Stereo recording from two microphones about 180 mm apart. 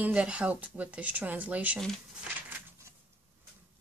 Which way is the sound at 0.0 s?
5° right (ahead or behind).